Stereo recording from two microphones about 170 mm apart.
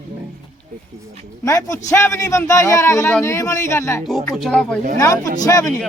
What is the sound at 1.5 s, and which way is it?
Speech, 20° left (ahead or behind).